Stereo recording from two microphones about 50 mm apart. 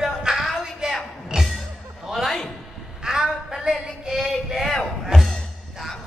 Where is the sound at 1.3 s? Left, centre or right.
Centre.